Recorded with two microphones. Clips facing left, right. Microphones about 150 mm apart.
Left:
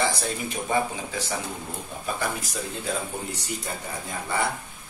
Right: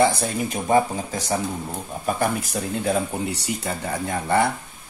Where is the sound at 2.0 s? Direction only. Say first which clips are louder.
Right 7 dB; 50° right (ahead or behind).